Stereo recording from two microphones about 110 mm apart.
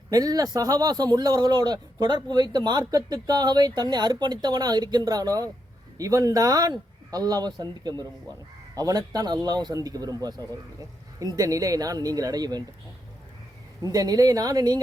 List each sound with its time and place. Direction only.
0.1 s speech: 35° right (ahead or behind)
13.8 s speech: 35° right (ahead or behind)